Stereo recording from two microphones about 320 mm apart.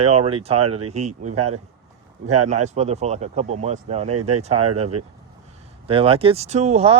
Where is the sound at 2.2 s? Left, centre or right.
Right.